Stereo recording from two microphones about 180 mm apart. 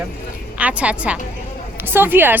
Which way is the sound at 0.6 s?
5° right (ahead or behind).